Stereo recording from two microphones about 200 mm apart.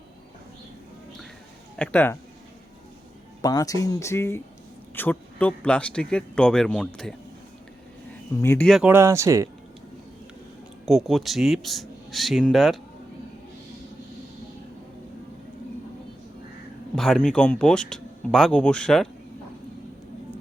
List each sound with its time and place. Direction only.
1.8 s speech: 10° left (ahead or behind)
3.4 s speech: 20° left (ahead or behind); by 7.2 s 5° left (ahead or behind)
8.4 s speech: 10° left (ahead or behind)
8.9 s speech: 15° right (ahead or behind)
10.8 s speech: centre (ahead or behind)
16.9 s speech: centre (ahead or behind)